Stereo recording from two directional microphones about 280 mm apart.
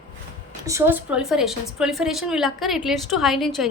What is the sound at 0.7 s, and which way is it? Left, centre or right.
A woman's voice, centre.